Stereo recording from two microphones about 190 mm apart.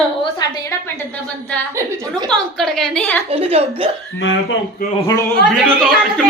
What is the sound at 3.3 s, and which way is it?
Speech, 30° right (ahead or behind).